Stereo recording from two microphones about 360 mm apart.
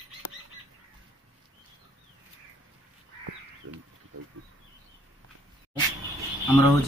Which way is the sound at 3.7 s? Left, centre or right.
Right.